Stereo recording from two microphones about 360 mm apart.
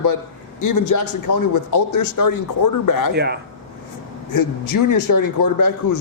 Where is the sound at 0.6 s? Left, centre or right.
Left.